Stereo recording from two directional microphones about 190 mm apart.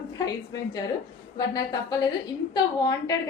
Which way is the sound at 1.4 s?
20° left (ahead or behind).